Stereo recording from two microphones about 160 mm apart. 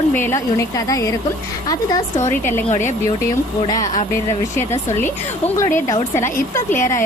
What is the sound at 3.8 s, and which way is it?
Speech, 50° left (ahead or behind).